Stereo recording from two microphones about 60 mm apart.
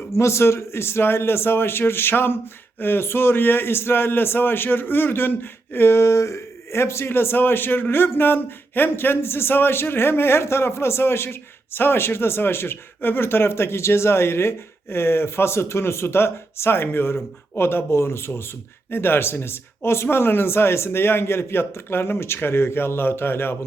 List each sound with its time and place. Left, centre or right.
0.1 s speech: left